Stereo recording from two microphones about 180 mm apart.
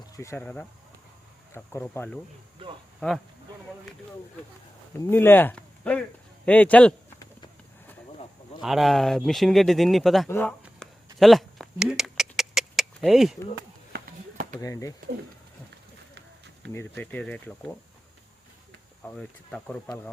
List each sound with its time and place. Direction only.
0.0 s speech: 15° left (ahead or behind)
4.9 s speech: 10° left (ahead or behind)
8.6 s speech: centre (ahead or behind)
10.2 s speech: 15° left (ahead or behind)
10.6 s a sound: centre (ahead or behind)
13.9 s a sound: 65° right (ahead or behind)
14.6 s speech: 20° left (ahead or behind)
16.6 s speech: 70° right (ahead or behind)
17.0 s speech: 10° left (ahead or behind)
19.0 s speech: 5° left (ahead or behind)